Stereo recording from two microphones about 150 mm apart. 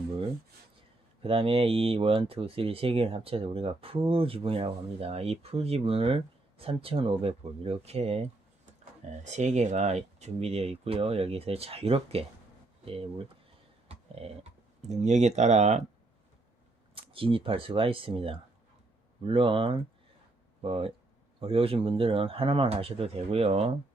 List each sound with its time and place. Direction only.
1.2 s speech: 40° right (ahead or behind)
13.8 s a sound: 45° right (ahead or behind)
14.8 s speech: 50° right (ahead or behind)
16.9 s speech: 35° right (ahead or behind)